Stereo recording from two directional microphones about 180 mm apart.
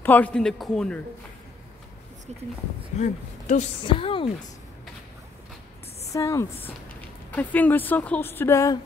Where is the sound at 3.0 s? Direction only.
40° left (ahead or behind).